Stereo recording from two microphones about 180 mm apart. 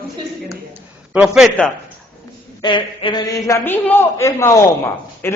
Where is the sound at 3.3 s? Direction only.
15° left (ahead or behind).